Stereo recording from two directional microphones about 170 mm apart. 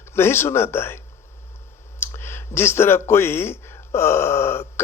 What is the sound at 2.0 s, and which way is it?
A man's voice, 15° left (ahead or behind).